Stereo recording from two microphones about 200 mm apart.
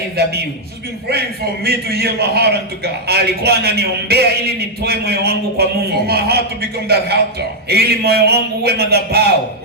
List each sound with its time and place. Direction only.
0.2 s a man's voice: 55° right (ahead or behind)
1.6 s a man's voice: 55° right (ahead or behind)